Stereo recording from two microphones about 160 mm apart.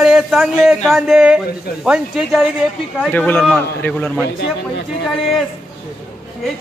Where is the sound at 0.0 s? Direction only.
5° right (ahead or behind).